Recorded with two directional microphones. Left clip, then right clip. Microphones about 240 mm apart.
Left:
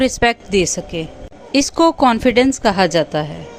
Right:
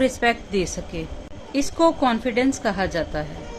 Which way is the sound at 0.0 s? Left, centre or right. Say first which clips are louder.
Left 5 dB; left.